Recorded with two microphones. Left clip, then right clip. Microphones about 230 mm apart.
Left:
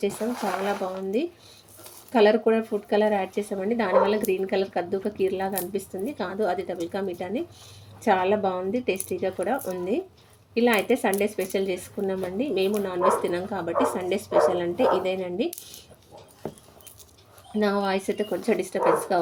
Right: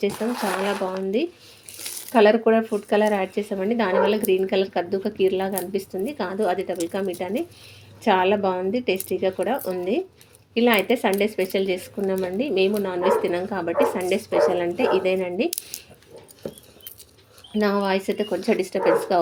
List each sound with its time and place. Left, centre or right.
0.0 s speech: centre
17.7 s speech: centre